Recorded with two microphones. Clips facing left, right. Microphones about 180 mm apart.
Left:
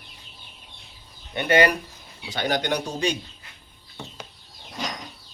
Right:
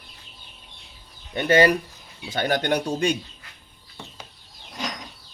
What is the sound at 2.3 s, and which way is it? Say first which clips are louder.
Speech: right 2 dB; 50° right (ahead or behind).